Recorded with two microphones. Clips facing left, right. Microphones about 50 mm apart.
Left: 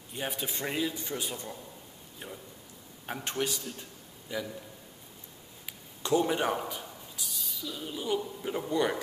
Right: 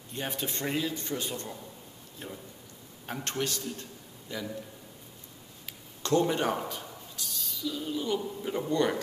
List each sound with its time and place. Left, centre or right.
0.1 s a man's voice: centre
5.7 s a sound: centre
8.2 s speech: centre